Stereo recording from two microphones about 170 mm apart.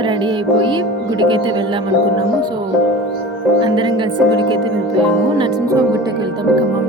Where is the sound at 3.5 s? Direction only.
25° right (ahead or behind).